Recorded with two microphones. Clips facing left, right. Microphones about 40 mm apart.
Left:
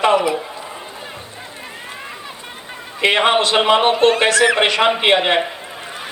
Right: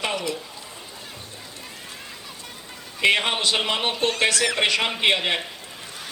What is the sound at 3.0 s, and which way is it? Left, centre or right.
A man's voice, left.